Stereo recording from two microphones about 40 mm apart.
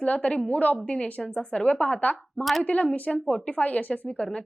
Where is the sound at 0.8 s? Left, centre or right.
Left.